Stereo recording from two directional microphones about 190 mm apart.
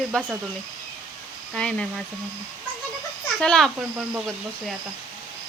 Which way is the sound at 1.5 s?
5° left (ahead or behind).